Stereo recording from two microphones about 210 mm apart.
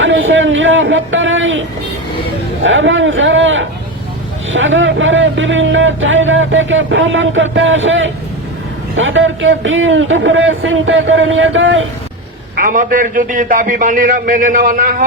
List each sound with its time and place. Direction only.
0.0 s speech: 65° right (ahead or behind)
2.6 s speech: 65° right (ahead or behind)
12.5 s a man's voice: 40° right (ahead or behind)